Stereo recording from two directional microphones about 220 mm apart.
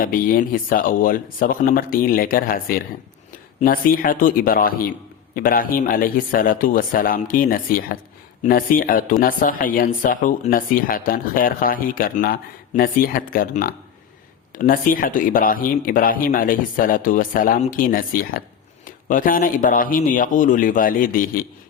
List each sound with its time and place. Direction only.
0.0 s speech: 40° left (ahead or behind)